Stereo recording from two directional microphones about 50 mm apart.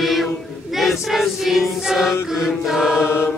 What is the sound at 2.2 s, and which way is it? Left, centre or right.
Chant, centre.